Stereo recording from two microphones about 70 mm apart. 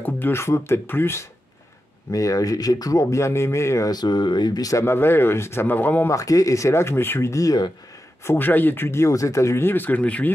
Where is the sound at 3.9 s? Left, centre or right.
Left.